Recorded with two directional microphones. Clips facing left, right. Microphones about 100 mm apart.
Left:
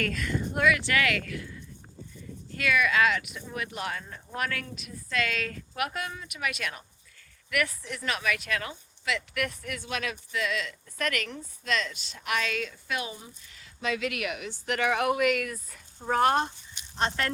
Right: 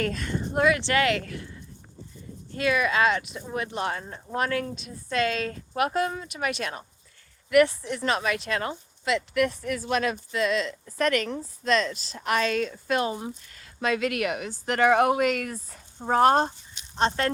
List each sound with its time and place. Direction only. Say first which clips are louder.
0.0 s speech: right 2 dB; 30° right (ahead or behind)
2.5 s speech: right 2 dB; 25° right (ahead or behind)